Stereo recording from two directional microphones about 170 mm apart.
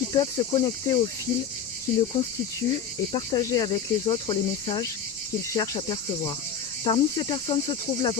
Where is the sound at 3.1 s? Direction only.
25° left (ahead or behind).